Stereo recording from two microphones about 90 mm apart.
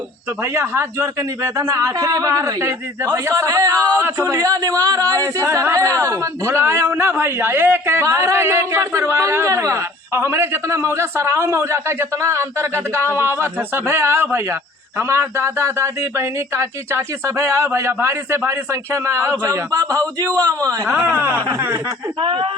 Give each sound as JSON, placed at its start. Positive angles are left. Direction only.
{"t": 0.4, "sound": "speech", "side_deg": -30}
{"t": 19.7, "sound": "a man's voice", "side_deg": -45}
{"t": 20.9, "sound": "speech", "side_deg": -30}
{"t": 22.2, "sound": "speech", "side_deg": -90}